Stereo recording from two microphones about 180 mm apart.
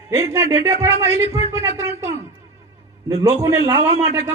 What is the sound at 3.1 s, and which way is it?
Speech, 15° right (ahead or behind).